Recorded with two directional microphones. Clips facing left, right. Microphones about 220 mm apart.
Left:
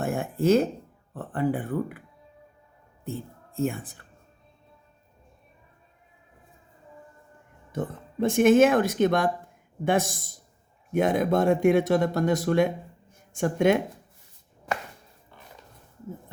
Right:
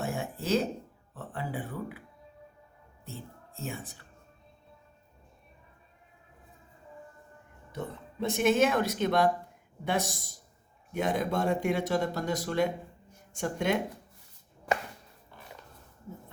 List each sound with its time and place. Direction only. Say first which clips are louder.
0.0 s a sound: left 9 dB; 55° left (ahead or behind)
1.1 s speech: left 10 dB; 55° left (ahead or behind)
7.7 s speech: left 6 dB; 50° left (ahead or behind)